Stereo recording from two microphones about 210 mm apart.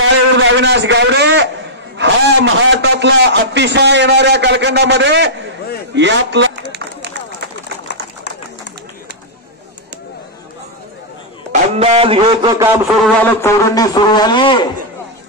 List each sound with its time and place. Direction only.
0.0 s a man's voice: 65° right (ahead or behind)
6.7 s run: 55° right (ahead or behind)
11.5 s speech: 30° right (ahead or behind)
13.0 s a man's voice: 10° left (ahead or behind)